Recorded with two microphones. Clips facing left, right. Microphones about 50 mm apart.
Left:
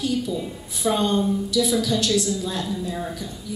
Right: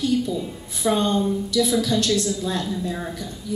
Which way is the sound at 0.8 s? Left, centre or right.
Right.